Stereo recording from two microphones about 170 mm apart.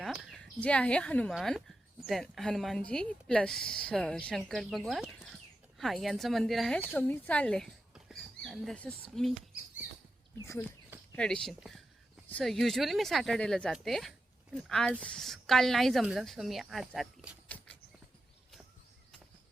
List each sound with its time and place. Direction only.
0.0 s speech: centre (ahead or behind)
10.4 s speech: 15° left (ahead or behind)
11.1 s speech: 5° left (ahead or behind)